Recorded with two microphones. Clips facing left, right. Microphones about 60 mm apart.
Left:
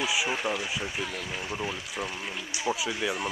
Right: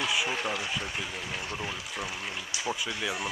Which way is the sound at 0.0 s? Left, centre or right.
Centre.